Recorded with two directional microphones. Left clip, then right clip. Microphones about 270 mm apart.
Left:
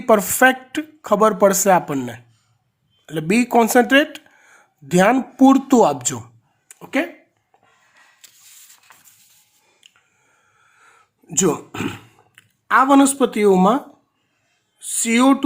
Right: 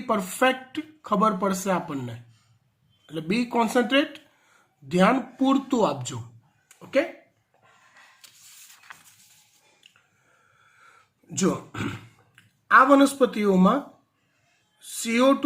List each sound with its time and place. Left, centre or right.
0.0 s speech: left
6.7 s a sound: left
11.3 s speech: left
15.0 s speech: left